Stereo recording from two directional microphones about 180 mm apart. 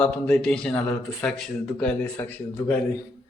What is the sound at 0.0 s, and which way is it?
A man's voice, 5° left (ahead or behind).